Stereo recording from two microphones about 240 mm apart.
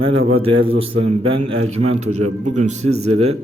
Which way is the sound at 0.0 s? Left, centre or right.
Right.